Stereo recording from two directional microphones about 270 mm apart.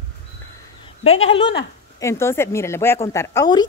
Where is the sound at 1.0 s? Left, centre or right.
Left.